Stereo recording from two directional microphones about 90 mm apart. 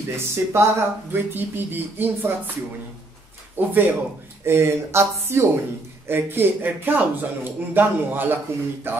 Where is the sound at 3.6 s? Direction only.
20° right (ahead or behind).